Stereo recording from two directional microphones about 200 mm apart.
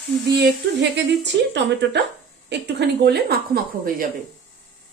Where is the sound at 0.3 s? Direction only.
60° right (ahead or behind).